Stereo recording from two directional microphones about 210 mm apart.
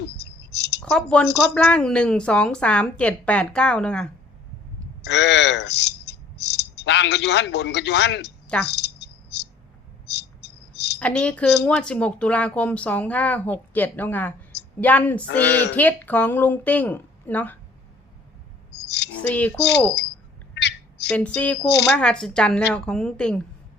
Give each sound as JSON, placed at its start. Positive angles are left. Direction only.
{"t": 0.0, "sound": "a sound", "side_deg": 55}
{"t": 0.8, "sound": "a woman's voice", "side_deg": 5}
{"t": 5.0, "sound": "speech", "side_deg": 55}
{"t": 8.6, "sound": "cricket", "side_deg": 55}
{"t": 11.0, "sound": "a woman's voice", "side_deg": 5}
{"t": 18.9, "sound": "cricket", "side_deg": 55}
{"t": 19.3, "sound": "a woman's voice", "side_deg": 5}
{"t": 20.6, "sound": "a sound", "side_deg": 55}
{"t": 21.1, "sound": "a woman's voice", "side_deg": 5}